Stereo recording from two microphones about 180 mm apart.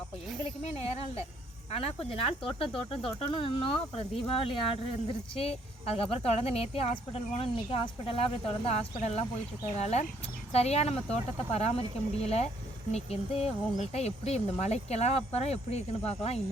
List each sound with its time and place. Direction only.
1.7 s speech: 35° left (ahead or behind)